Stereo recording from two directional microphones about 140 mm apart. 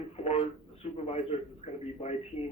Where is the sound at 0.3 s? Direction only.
45° left (ahead or behind).